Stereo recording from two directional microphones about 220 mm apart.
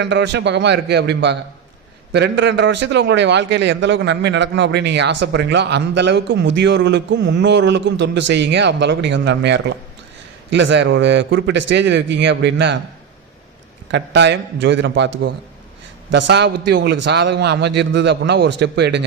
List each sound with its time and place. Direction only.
0.0 s a man's voice: 55° right (ahead or behind)
13.9 s a man's voice: 50° right (ahead or behind)